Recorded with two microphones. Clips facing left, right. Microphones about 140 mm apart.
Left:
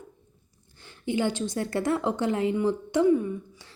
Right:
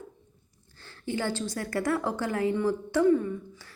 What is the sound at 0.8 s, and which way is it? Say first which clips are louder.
A woman's voice: left 4 dB; 15° left (ahead or behind).